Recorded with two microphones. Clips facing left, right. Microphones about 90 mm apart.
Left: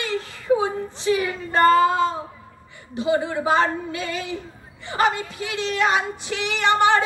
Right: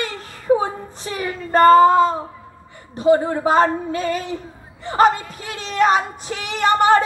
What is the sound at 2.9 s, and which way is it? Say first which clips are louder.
A woman's voice: right 6 dB; 45° right (ahead or behind).